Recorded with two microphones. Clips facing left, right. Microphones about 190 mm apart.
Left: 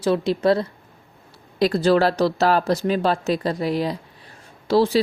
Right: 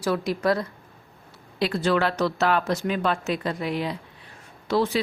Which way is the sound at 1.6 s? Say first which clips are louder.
Left 6 dB; 40° left (ahead or behind).